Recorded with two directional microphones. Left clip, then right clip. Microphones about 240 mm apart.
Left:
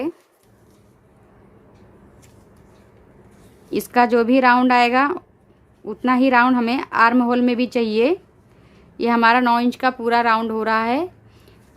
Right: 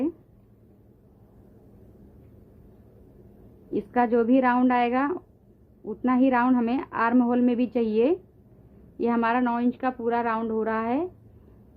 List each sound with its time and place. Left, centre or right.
3.7 s a woman's voice: centre